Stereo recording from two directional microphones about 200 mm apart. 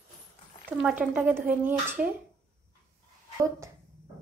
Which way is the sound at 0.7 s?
5° right (ahead or behind).